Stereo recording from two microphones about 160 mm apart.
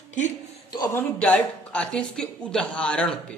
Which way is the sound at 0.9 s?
10° left (ahead or behind).